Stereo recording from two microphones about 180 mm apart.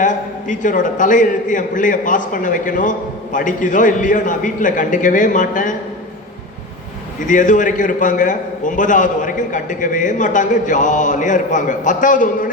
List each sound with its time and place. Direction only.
0.0 s a man's voice: 45° left (ahead or behind)
7.3 s a man's voice: 45° left (ahead or behind)